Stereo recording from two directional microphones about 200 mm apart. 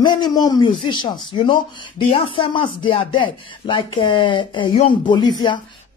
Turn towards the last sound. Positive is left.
turn(degrees=20)  # may be behind; listen again after turning